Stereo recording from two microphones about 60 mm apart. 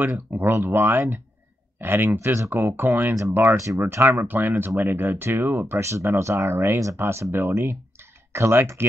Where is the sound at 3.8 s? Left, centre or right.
Right.